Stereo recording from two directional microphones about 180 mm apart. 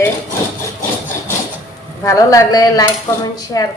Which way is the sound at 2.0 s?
15° left (ahead or behind).